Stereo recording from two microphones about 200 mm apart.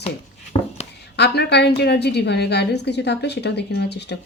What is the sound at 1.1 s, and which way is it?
A woman's voice, 55° left (ahead or behind).